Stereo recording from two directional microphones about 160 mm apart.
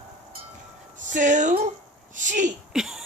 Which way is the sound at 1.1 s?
50° right (ahead or behind).